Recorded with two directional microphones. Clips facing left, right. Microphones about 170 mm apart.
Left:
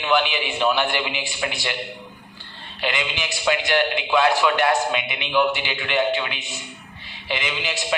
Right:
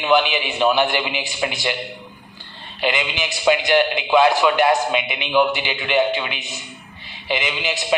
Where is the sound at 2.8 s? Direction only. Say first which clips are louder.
Right 4 dB; 20° right (ahead or behind).